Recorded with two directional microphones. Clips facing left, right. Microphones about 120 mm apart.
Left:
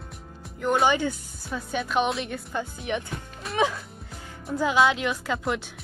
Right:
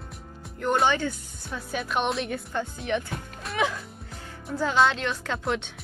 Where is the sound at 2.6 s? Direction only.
15° left (ahead or behind).